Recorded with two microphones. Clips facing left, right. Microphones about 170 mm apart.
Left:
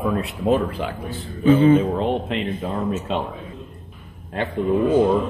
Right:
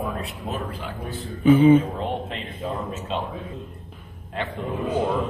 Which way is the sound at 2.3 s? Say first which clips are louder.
Left 9 dB; 70° left (ahead or behind).